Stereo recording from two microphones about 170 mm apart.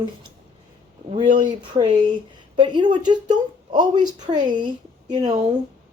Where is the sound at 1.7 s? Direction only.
30° right (ahead or behind).